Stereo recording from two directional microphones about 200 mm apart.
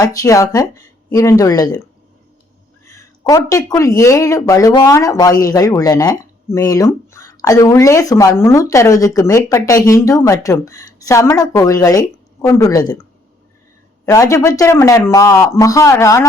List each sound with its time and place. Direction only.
0.0 s speech: 15° left (ahead or behind)
2.8 s speech: 15° left (ahead or behind)